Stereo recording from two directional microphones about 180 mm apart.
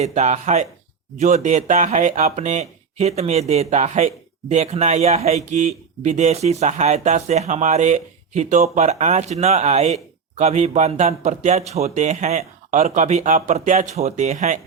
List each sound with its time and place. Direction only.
0.0 s speech: 40° right (ahead or behind)